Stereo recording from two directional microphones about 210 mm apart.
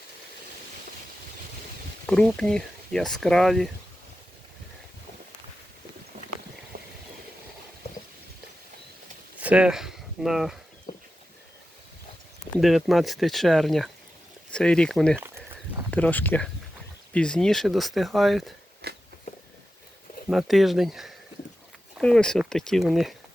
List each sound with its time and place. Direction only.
2.0 s speech: 5° left (ahead or behind)
6.7 s a sound: 40° right (ahead or behind)
9.4 s speech: 5° right (ahead or behind)
10.9 s a sound: 25° left (ahead or behind)
12.5 s speech: centre (ahead or behind)
18.8 s biting: 50° right (ahead or behind)
20.3 s speech: centre (ahead or behind)